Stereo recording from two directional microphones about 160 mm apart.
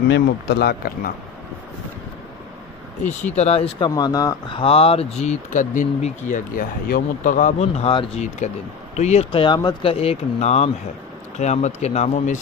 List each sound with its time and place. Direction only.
0.1 s speech: 90° left
3.3 s speech: 40° left (ahead or behind)
3.9 s speech: 25° left (ahead or behind); by 7.8 s 50° left (ahead or behind)
7.8 s speech: 35° left (ahead or behind)